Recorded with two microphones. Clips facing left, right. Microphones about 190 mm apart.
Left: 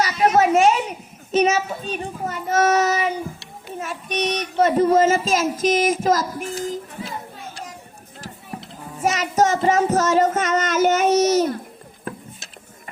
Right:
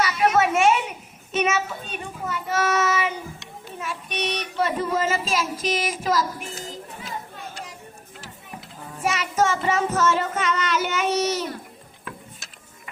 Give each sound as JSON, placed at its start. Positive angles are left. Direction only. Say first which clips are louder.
{"t": 0.0, "sound": "a child's voice", "louder": "left 3 dB", "side_deg": 40}
{"t": 9.0, "sound": "child singing", "louder": "left 4 dB", "side_deg": 40}